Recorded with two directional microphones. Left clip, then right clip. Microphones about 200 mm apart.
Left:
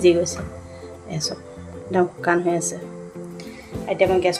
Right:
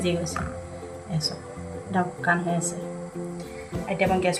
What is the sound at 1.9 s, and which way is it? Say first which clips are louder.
Speech: left 5 dB; 45° left (ahead or behind).